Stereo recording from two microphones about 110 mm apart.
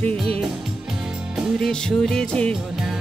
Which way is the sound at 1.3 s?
5° right (ahead or behind).